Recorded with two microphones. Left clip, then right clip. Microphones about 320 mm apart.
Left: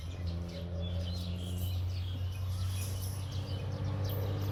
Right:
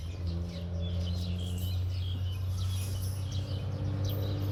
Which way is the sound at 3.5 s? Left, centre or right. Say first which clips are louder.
Even; left.